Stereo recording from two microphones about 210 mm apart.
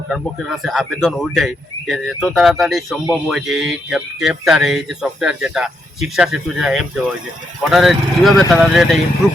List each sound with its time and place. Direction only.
0.1 s speech: centre (ahead or behind)